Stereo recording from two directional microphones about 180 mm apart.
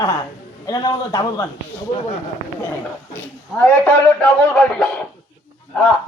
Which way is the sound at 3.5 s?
10° left (ahead or behind).